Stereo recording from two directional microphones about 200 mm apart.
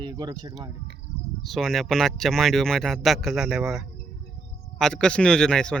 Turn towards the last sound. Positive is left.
turn(degrees=5)  # may be behind; listen again after turning